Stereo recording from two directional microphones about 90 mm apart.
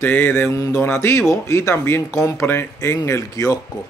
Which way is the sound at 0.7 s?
30° left (ahead or behind).